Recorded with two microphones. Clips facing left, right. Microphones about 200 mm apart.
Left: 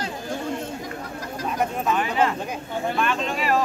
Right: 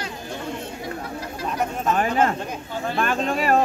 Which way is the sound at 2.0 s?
45° right (ahead or behind).